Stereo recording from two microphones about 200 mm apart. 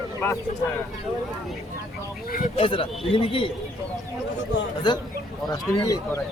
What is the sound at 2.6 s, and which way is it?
Speech, 25° left (ahead or behind).